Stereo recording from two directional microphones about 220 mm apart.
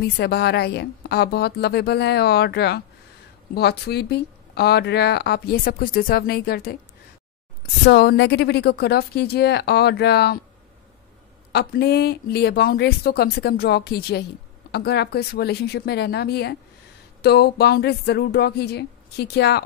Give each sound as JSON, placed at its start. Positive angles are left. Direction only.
{"t": 0.0, "sound": "speech", "side_deg": 45}
{"t": 7.8, "sound": "speech", "side_deg": 50}
{"t": 11.5, "sound": "speech", "side_deg": 45}